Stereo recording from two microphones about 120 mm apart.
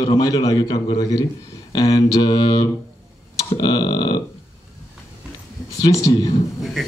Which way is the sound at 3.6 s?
40° left (ahead or behind).